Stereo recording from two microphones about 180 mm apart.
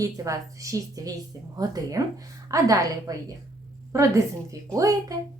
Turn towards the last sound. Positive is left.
turn(degrees=-20)  # may be behind; listen again after turning